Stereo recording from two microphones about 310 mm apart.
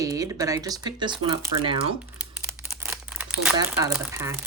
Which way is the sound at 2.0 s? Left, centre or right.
Centre.